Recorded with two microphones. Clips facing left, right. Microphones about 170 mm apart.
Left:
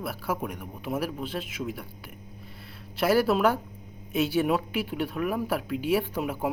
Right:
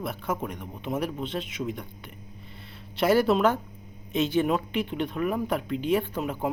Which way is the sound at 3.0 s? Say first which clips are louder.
Right 1 dB; centre (ahead or behind).